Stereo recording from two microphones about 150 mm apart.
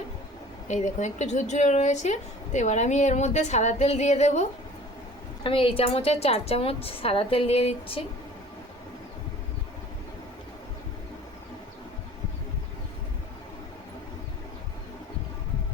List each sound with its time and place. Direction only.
0.7 s speech: 50° left (ahead or behind)
5.4 s a woman's voice: 35° left (ahead or behind)